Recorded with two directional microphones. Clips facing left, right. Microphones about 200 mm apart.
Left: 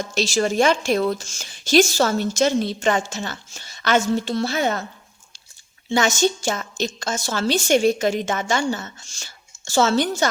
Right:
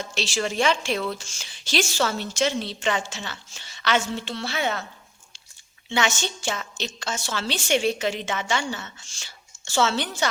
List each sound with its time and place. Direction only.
0.0 s a woman's voice: 40° left (ahead or behind)
5.9 s a woman's voice: 40° left (ahead or behind)